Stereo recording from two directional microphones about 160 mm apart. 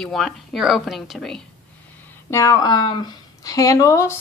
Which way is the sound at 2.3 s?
20° left (ahead or behind).